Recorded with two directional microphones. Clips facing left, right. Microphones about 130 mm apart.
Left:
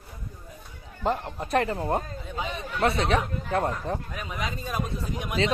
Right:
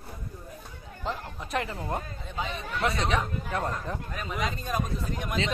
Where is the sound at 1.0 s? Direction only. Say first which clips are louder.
Left 7 dB; 50° left (ahead or behind).